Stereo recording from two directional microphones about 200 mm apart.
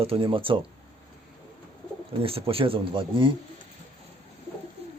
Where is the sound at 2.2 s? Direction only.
30° right (ahead or behind).